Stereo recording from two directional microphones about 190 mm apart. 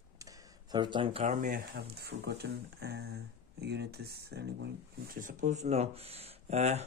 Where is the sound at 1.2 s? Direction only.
45° right (ahead or behind).